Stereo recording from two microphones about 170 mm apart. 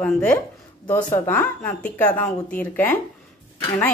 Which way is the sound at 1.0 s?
15° left (ahead or behind).